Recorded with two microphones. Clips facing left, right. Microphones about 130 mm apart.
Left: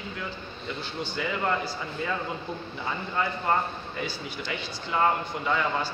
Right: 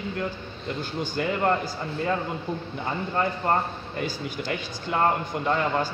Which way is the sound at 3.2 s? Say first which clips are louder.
Right 2 dB; 40° right (ahead or behind).